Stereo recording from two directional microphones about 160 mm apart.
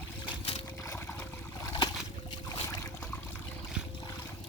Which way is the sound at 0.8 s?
15° left (ahead or behind).